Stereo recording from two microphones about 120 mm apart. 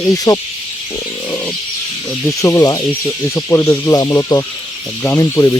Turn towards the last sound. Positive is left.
turn(degrees=25)  # may be behind; listen again after turning